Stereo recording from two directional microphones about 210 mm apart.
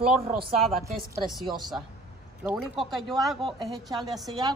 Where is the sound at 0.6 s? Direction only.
Centre (ahead or behind).